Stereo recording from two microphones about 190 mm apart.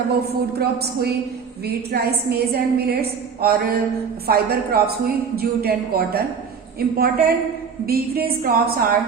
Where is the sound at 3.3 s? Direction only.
55° right (ahead or behind).